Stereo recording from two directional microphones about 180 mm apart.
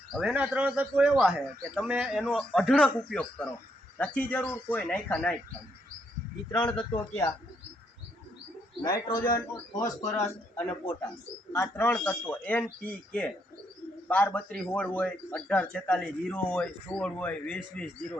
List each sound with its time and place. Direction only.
0.1 s a man's voice: 5° right (ahead or behind)
6.5 s a man's voice: 25° left (ahead or behind)
8.8 s a man's voice: 25° left (ahead or behind)